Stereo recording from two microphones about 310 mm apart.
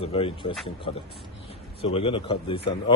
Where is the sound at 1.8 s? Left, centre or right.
Centre.